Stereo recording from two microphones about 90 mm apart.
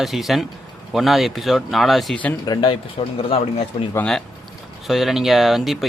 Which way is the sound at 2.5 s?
70° left (ahead or behind).